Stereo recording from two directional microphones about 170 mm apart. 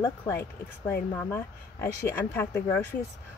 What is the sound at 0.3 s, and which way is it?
A woman's voice, 15° left (ahead or behind).